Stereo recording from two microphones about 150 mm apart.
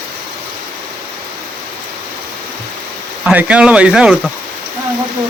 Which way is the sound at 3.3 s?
10° right (ahead or behind).